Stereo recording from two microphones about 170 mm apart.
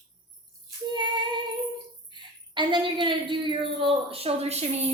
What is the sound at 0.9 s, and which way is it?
A woman's voice, 25° right (ahead or behind).